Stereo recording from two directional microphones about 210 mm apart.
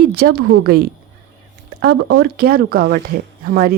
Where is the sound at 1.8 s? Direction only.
55° right (ahead or behind).